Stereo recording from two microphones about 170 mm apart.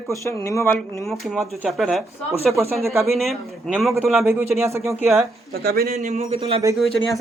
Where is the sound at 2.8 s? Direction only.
15° right (ahead or behind).